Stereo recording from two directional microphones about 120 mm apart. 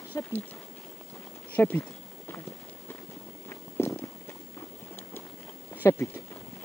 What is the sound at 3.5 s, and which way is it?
Walk, 20° left (ahead or behind).